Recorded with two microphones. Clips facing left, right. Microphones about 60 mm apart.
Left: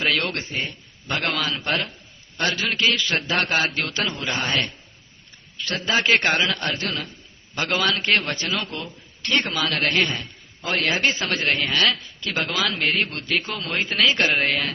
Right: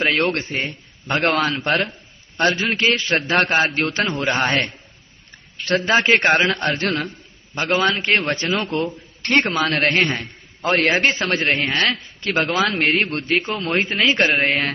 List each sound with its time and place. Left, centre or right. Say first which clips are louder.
0.0 s a man's voice: right 4 dB; right
1.2 s a man's voice: right 7 dB; right
2.4 s a man's voice: right 4 dB; right
6.8 s a man's voice: right 6 dB; right
7.5 s a man's voice: right 4 dB; right